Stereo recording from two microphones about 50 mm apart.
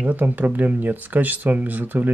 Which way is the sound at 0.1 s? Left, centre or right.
Right.